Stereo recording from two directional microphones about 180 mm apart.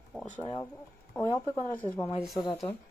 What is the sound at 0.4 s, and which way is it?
Speech, 30° left (ahead or behind).